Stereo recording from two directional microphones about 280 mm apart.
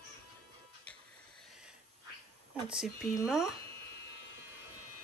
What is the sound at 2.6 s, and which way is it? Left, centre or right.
Speech, centre.